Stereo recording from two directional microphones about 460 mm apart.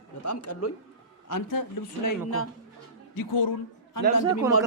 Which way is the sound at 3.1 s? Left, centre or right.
Left.